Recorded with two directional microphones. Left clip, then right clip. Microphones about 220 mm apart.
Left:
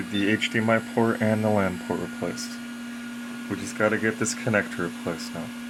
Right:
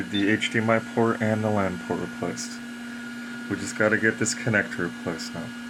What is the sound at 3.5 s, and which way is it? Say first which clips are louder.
Speech: right 1 dB; 15° left (ahead or behind).